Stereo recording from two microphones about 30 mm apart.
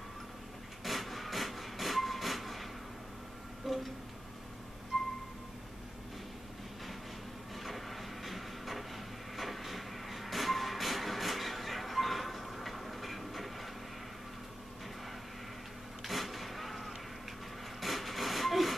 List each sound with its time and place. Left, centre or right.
0.8 s train: centre
3.6 s music: centre
4.9 s music: centre
7.5 s a sound: centre
16.0 s vehicle: centre
17.7 s a sound: centre